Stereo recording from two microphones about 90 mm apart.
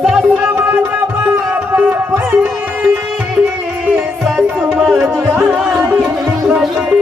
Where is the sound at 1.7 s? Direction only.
25° right (ahead or behind).